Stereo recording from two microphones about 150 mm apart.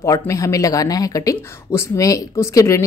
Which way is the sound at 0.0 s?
20° left (ahead or behind).